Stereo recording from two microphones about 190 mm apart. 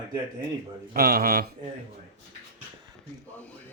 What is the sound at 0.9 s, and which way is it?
Speech, 50° right (ahead or behind).